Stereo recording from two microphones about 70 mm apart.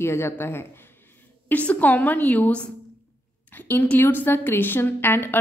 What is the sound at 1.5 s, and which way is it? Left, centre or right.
A woman's voice, left.